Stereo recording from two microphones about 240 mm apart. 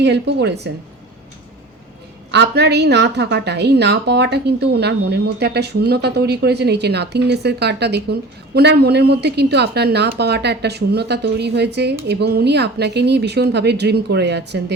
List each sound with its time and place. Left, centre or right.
0.0 s a woman's voice: right
2.3 s a woman's voice: right